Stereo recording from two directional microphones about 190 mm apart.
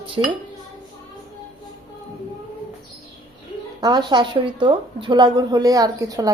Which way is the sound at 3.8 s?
20° right (ahead or behind).